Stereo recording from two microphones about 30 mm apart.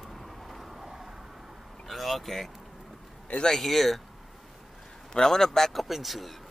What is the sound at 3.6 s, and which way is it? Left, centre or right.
Speech, centre.